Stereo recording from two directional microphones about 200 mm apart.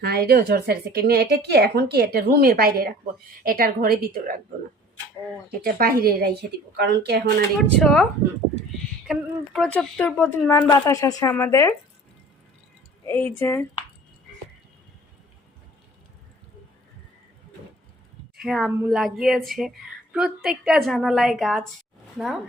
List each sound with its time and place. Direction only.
0.0 s speech: 50° right (ahead or behind)
5.5 s speech: 45° right (ahead or behind)
7.8 s speech: centre (ahead or behind)
9.0 s speech: centre (ahead or behind)
13.1 s speech: 10° left (ahead or behind)
18.3 s speech: centre (ahead or behind)